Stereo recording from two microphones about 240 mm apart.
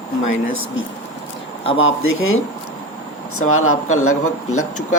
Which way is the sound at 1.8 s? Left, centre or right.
Left.